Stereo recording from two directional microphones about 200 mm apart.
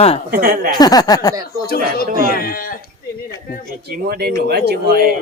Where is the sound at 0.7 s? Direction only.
20° left (ahead or behind).